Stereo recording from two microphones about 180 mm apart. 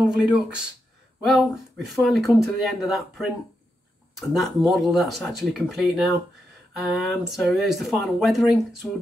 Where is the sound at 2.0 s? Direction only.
Centre (ahead or behind).